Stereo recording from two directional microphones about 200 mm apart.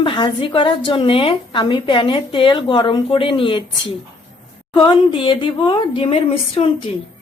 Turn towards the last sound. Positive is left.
turn(degrees=25)  # may be behind; listen again after turning